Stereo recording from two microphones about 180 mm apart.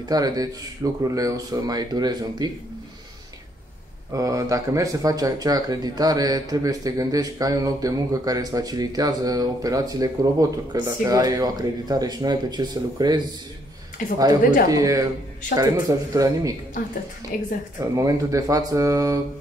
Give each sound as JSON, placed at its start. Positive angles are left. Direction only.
{"t": 0.1, "sound": "speech", "side_deg": -20}
{"t": 4.1, "sound": "speech", "side_deg": -20}
{"t": 17.3, "sound": "speech", "side_deg": 50}
{"t": 17.9, "sound": "speech", "side_deg": -15}